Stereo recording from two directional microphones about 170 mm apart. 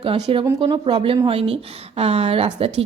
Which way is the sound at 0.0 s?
35° right (ahead or behind).